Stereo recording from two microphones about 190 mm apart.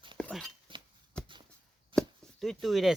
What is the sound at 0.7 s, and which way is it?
Chink, 25° right (ahead or behind).